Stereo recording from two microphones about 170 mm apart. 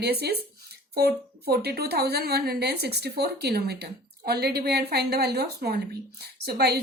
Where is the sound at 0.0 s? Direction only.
70° right (ahead or behind).